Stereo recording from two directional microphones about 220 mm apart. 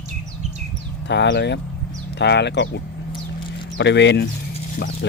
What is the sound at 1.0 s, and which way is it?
Speech, 50° left (ahead or behind).